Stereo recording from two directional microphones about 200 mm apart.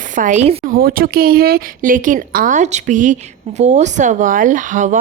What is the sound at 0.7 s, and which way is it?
Speech, 45° right (ahead or behind).